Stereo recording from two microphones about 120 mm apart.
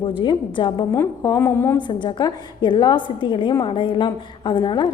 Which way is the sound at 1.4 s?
20° left (ahead or behind).